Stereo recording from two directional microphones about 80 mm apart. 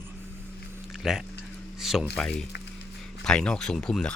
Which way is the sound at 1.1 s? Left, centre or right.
Centre.